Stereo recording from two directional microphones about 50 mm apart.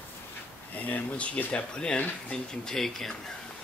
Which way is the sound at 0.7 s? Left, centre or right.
Left.